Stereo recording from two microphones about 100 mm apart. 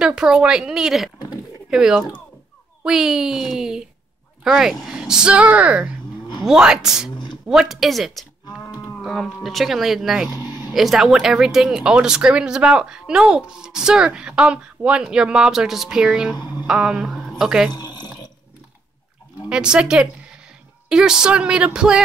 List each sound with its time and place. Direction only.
0.0 s speech: 10° right (ahead or behind)
10.3 s a sound: 45° left (ahead or behind)
10.7 s speech: centre (ahead or behind)
16.3 s speech: 45° left (ahead or behind)
16.6 s speech: 10° right (ahead or behind)
17.7 s a sound: 45° left (ahead or behind)
19.5 s speech: 10° right (ahead or behind)